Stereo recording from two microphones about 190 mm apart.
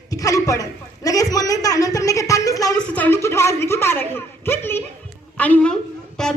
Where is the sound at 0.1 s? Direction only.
15° left (ahead or behind).